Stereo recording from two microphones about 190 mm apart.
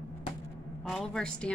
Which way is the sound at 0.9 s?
5° left (ahead or behind).